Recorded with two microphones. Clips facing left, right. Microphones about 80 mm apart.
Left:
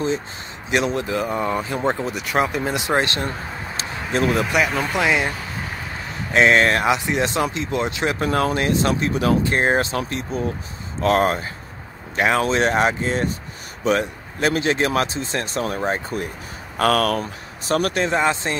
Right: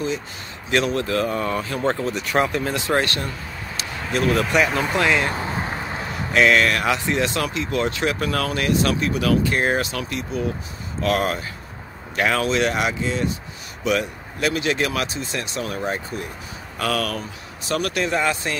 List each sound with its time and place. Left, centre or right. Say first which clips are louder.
0.7 s speech: even; centre
2.6 s speech: left 1 dB; centre
4.5 s speech: right 1 dB; centre
4.9 s speech: even; centre
5.3 s a sound: right 4 dB; right
6.3 s speech: left 2 dB; left
16.7 s speech: left 6 dB; left